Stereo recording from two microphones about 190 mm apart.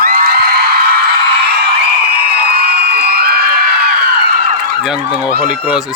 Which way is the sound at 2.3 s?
55° right (ahead or behind).